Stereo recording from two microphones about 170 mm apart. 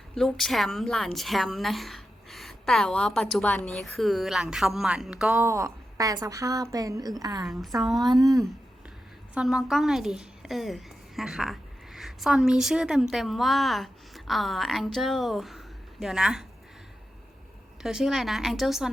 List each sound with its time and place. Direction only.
0.1 s a woman's voice: centre (ahead or behind); by 7.4 s 20° right (ahead or behind)
7.4 s a woman's voice: centre (ahead or behind)
7.9 s speech: 25° right (ahead or behind)
9.3 s a woman's voice: 5° right (ahead or behind)
17.8 s a woman's voice: 5° right (ahead or behind)